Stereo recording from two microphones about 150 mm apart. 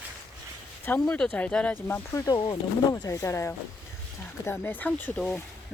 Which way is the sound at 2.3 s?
35° left (ahead or behind).